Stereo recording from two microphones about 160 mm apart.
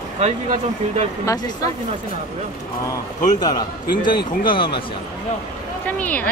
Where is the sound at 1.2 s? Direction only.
20° left (ahead or behind).